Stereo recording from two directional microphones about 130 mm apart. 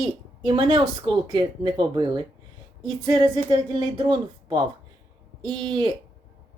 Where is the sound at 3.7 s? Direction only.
35° right (ahead or behind).